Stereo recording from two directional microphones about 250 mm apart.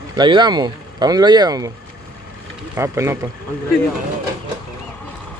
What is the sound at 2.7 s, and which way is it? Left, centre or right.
Speech, centre.